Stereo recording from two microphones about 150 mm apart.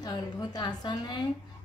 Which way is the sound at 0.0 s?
25° left (ahead or behind).